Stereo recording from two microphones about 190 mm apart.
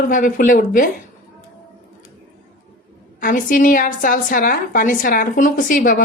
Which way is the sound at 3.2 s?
45° left (ahead or behind).